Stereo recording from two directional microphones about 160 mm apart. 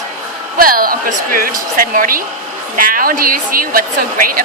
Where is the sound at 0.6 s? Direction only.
65° right (ahead or behind).